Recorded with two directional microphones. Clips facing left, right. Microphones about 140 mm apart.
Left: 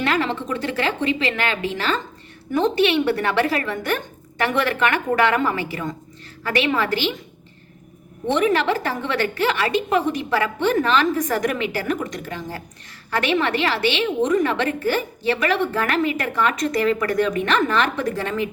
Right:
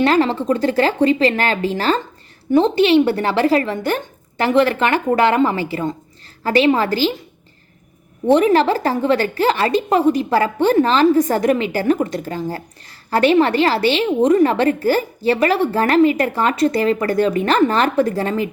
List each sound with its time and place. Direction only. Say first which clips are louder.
0.0 s a woman's voice: right 7 dB; 35° right (ahead or behind)
8.3 s a woman's voice: right 6 dB; 35° right (ahead or behind)